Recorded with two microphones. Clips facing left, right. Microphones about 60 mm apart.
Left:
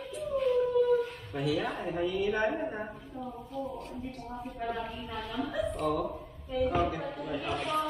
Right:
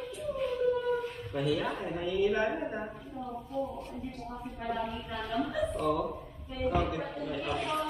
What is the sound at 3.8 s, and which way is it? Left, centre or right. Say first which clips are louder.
Speech: even; centre.